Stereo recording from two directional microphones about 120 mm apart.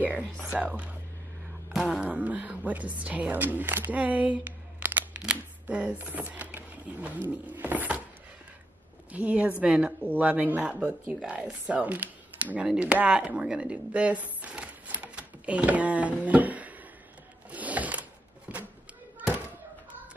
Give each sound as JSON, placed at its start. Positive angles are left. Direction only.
{"t": 0.0, "sound": "a woman's voice", "side_deg": -10}
{"t": 9.1, "sound": "speech", "side_deg": -10}
{"t": 17.5, "sound": "a sound", "side_deg": -10}